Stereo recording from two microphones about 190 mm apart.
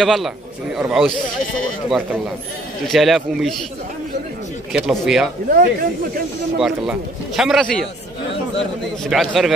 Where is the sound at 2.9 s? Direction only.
Centre (ahead or behind).